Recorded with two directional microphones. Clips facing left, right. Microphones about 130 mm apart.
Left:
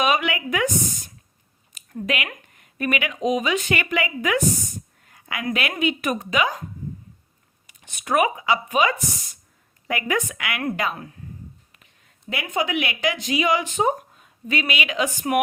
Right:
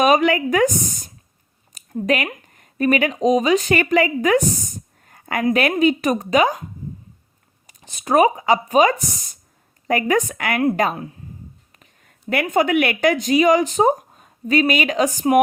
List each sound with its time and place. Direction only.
0.0 s speech: 40° right (ahead or behind)
7.7 s speech: 35° right (ahead or behind)
10.9 s speech: 25° right (ahead or behind)
11.7 s speech: 45° right (ahead or behind)